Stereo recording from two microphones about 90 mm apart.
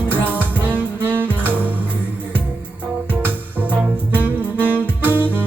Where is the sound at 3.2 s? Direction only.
20° right (ahead or behind).